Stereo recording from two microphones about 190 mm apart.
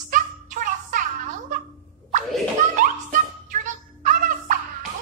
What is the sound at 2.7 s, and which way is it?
Music, 45° right (ahead or behind).